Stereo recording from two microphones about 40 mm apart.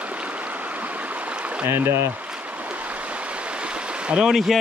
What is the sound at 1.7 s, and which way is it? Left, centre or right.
Speech, right.